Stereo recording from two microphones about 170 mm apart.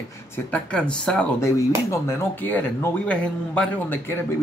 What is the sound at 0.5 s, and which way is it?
Speech, 5° left (ahead or behind).